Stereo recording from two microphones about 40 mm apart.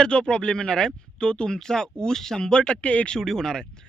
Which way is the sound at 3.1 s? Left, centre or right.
Centre.